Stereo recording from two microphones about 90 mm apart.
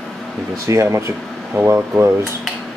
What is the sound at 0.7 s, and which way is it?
Speech, 30° right (ahead or behind).